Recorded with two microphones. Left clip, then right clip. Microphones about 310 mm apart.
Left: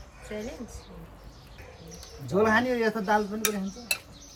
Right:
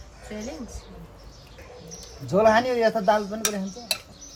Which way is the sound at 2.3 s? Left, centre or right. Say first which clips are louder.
Right 5 dB; centre.